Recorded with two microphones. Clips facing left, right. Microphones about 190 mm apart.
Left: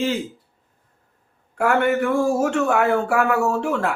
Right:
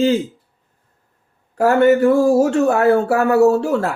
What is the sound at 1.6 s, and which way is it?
Speech, 35° right (ahead or behind).